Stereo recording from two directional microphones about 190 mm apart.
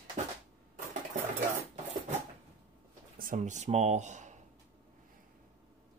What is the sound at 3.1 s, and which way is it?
Speech, 45° right (ahead or behind).